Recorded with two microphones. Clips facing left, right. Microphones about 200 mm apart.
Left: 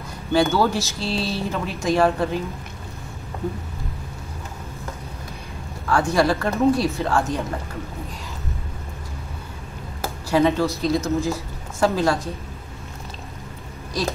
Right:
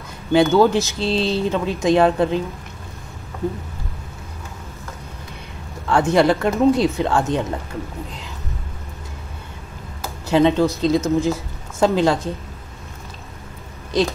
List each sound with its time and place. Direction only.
0.3 s speech: 20° right (ahead or behind)
5.9 s speech: 20° right (ahead or behind)
10.3 s speech: 15° right (ahead or behind)
13.9 s speech: 25° right (ahead or behind)